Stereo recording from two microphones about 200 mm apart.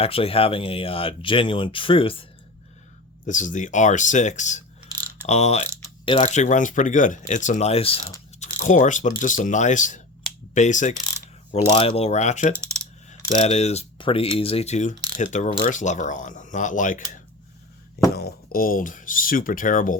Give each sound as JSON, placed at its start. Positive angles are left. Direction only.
{"t": 0.0, "sound": "speech", "side_deg": 30}
{"t": 3.2, "sound": "speech", "side_deg": 40}
{"t": 12.5, "sound": "coin", "side_deg": -15}
{"t": 13.2, "sound": "speech", "side_deg": 30}
{"t": 18.2, "sound": "speech", "side_deg": 50}